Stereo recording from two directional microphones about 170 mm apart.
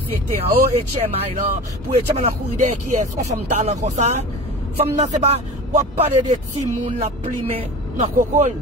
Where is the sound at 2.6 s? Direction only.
45° right (ahead or behind).